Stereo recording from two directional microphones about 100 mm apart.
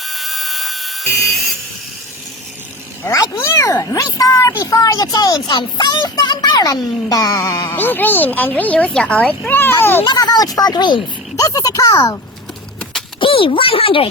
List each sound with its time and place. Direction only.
0.0 s a sound: centre (ahead or behind)
3.0 s speech: 30° left (ahead or behind); by 9.6 s 10° left (ahead or behind)
9.6 s a child's voice: 25° left (ahead or behind)
10.0 s speech: 45° left (ahead or behind)
11.3 s speech: 35° left (ahead or behind)
13.1 s speech: 65° left (ahead or behind)